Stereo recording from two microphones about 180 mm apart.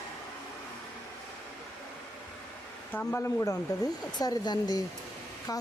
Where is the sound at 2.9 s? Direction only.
10° left (ahead or behind).